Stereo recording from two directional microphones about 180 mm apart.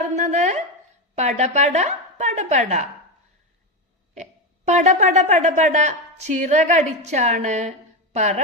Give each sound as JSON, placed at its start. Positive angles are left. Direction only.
{"t": 0.0, "sound": "a sound", "side_deg": -40}
{"t": 1.4, "sound": "speech", "side_deg": -40}
{"t": 4.1, "sound": "speech", "side_deg": -40}